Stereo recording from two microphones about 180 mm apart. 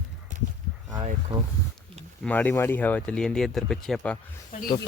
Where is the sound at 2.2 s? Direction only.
10° left (ahead or behind).